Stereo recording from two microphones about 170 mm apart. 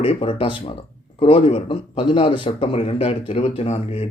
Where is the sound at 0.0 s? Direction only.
35° left (ahead or behind).